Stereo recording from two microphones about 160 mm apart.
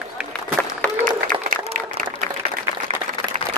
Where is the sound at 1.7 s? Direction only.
55° right (ahead or behind).